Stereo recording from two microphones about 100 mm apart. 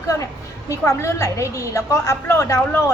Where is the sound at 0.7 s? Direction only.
30° left (ahead or behind).